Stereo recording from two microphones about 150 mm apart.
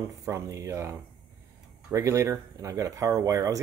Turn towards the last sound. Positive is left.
turn(degrees=-20)  # may be behind; listen again after turning